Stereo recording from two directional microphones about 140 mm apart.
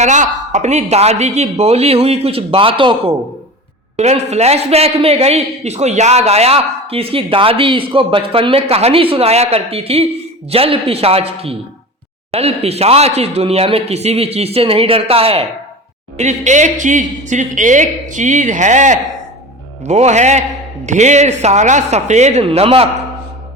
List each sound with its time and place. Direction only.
0.0 s a man's voice: 60° right (ahead or behind); by 3.0 s 40° right (ahead or behind)
3.9 s a man's voice: 50° right (ahead or behind)
16.1 s a woman's voice: 55° right (ahead or behind)